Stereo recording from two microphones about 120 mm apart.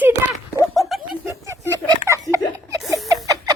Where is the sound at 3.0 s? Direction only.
30° right (ahead or behind).